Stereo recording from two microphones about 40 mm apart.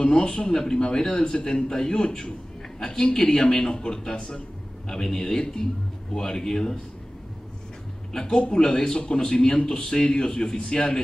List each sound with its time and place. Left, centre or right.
0.0 s speech: left
0.5 s a man's voice: centre
8.1 s a man's voice: centre